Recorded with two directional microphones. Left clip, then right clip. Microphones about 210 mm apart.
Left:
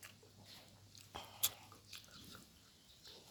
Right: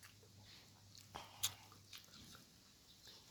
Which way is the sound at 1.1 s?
5° left (ahead or behind).